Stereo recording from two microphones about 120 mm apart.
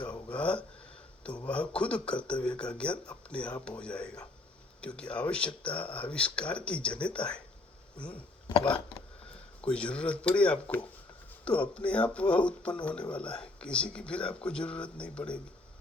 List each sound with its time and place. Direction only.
0.0 s speech: 10° left (ahead or behind)
8.4 s speech: 35° left (ahead or behind)
9.6 s speech: 10° left (ahead or behind)